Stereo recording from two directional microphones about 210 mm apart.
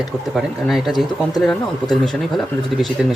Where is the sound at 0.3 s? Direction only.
Centre (ahead or behind).